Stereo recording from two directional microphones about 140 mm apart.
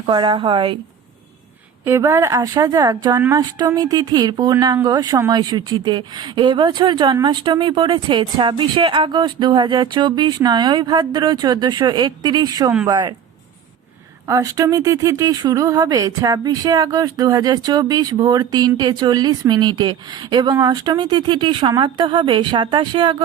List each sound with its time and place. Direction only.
0.0 s speech: 35° right (ahead or behind)
1.8 s speech: 20° right (ahead or behind)
3.2 s speech: 20° right (ahead or behind)
14.3 s speech: 20° right (ahead or behind)